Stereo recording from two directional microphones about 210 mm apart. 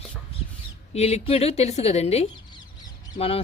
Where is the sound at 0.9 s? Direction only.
30° left (ahead or behind).